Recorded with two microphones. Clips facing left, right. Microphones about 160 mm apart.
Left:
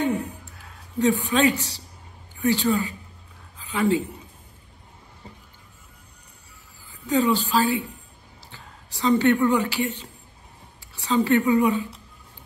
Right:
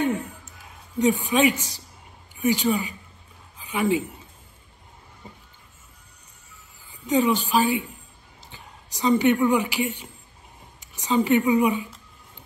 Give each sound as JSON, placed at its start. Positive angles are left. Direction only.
{"t": 0.5, "sound": "speech", "side_deg": -15}
{"t": 3.5, "sound": "a sound", "side_deg": -15}
{"t": 7.1, "sound": "a woman's voice", "side_deg": -15}